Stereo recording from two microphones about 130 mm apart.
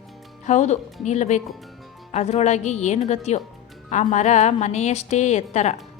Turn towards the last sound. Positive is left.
turn(degrees=60)  # may be behind; listen again after turning